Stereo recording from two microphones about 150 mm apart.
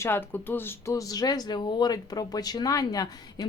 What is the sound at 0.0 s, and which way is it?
Speech, 15° left (ahead or behind).